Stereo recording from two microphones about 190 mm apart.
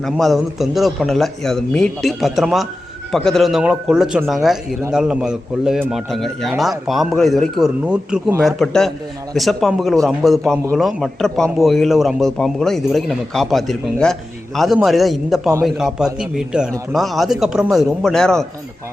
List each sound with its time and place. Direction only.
0.0 s a man's voice: centre (ahead or behind)